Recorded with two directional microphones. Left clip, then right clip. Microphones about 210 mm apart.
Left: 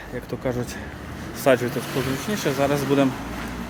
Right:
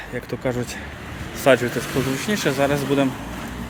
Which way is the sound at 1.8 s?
55° right (ahead or behind).